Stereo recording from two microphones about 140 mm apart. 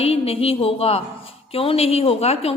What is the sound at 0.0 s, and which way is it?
A woman's voice, 45° left (ahead or behind).